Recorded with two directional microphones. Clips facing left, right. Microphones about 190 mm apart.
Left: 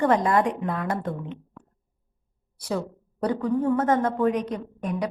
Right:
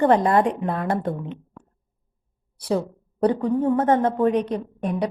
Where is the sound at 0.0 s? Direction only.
30° right (ahead or behind).